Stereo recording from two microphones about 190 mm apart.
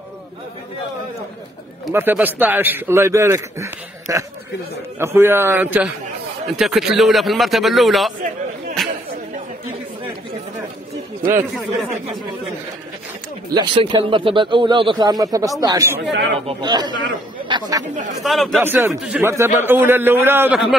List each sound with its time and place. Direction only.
1.9 s a man's voice: 10° right (ahead or behind)
8.8 s a sound: centre (ahead or behind)
13.5 s speech: 25° right (ahead or behind)
16.1 s speech: 70° right (ahead or behind)
16.4 s speech: 20° right (ahead or behind)
18.2 s a man's voice: centre (ahead or behind)
18.6 s speech: 10° right (ahead or behind)